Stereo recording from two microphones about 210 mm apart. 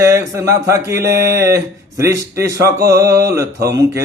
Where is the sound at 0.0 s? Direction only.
15° right (ahead or behind).